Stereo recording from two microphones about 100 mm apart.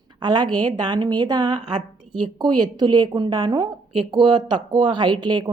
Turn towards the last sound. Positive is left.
turn(degrees=-45)  # may be behind; listen again after turning